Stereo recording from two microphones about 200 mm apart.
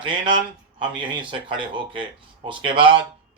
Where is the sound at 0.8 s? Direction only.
25° right (ahead or behind).